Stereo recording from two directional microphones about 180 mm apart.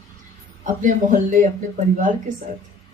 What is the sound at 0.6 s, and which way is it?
A woman's voice, 45° right (ahead or behind).